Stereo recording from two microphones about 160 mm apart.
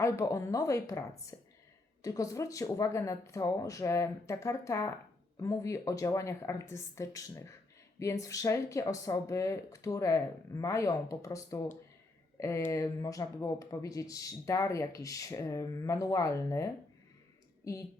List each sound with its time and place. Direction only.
0.0 s speech: 20° left (ahead or behind)
17.7 s speech: 20° left (ahead or behind)